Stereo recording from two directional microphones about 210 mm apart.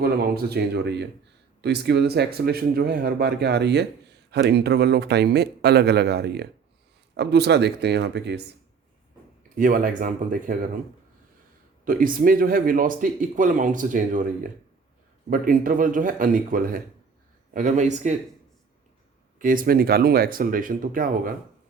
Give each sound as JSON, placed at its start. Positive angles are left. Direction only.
{"t": 0.0, "sound": "a man's voice", "side_deg": -50}
{"t": 9.6, "sound": "speech", "side_deg": -40}
{"t": 11.9, "sound": "speech", "side_deg": -40}
{"t": 15.3, "sound": "speech", "side_deg": -40}
{"t": 19.4, "sound": "a man's voice", "side_deg": -40}